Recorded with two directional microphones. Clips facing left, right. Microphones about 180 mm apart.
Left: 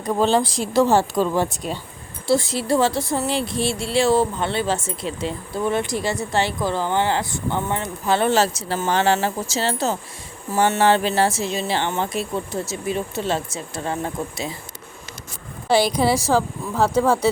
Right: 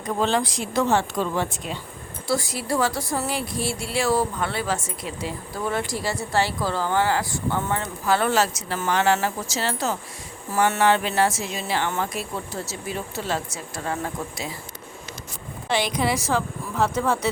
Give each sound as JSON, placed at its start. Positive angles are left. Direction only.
{"t": 0.0, "sound": "speech", "side_deg": 35}
{"t": 2.2, "sound": "speech", "side_deg": 25}
{"t": 15.7, "sound": "speech", "side_deg": 35}